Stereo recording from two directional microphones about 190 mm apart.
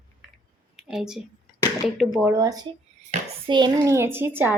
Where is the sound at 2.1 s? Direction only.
15° right (ahead or behind).